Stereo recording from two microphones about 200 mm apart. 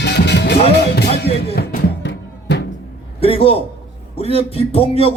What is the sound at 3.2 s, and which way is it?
A man's voice, 30° left (ahead or behind).